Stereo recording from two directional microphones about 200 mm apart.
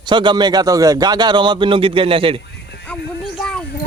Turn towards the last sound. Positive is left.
turn(degrees=5)  # may be behind; listen again after turning